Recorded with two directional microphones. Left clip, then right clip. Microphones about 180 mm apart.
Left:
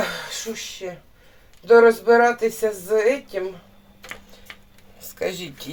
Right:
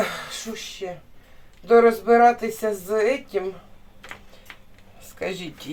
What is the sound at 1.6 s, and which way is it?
Speech, 35° left (ahead or behind).